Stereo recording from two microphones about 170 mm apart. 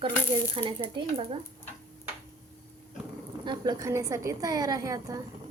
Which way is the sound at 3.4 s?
20° right (ahead or behind).